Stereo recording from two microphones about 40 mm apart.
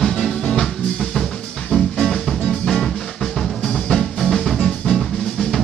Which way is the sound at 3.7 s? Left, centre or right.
Centre.